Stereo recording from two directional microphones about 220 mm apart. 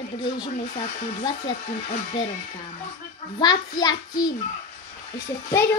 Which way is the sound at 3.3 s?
20° left (ahead or behind).